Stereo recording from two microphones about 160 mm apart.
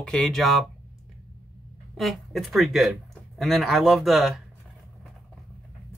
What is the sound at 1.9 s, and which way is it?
Speech, centre (ahead or behind).